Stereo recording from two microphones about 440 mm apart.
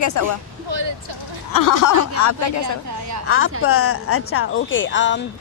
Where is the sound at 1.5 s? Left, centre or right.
Left.